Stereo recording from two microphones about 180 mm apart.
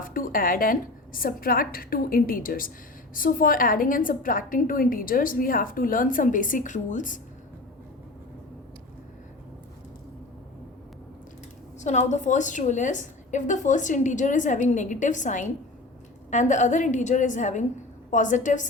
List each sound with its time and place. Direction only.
0.0 s a woman's voice: 50° left (ahead or behind)
11.8 s a woman's voice: 40° left (ahead or behind)